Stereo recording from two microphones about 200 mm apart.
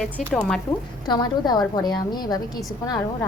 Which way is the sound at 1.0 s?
20° left (ahead or behind).